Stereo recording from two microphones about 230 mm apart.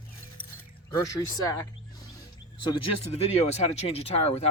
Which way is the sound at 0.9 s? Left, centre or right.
Centre.